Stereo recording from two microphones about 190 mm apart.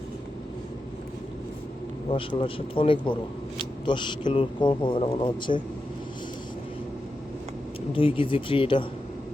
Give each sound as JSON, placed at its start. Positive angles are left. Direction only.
{"t": 2.0, "sound": "speech", "side_deg": 25}
{"t": 7.9, "sound": "speech", "side_deg": 30}